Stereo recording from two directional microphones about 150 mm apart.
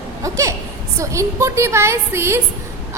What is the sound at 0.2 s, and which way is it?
A woman's voice, 20° right (ahead or behind).